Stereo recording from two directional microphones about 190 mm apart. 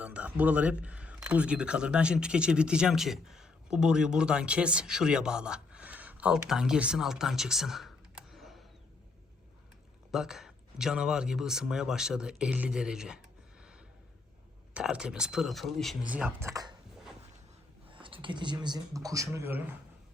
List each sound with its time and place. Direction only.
0.0 s speech: 5° right (ahead or behind)
10.1 s speech: centre (ahead or behind)
13.6 s gasp: 5° right (ahead or behind)
14.7 s speech: 5° right (ahead or behind)
17.9 s speech: 25° right (ahead or behind); by 19.7 s 10° right (ahead or behind)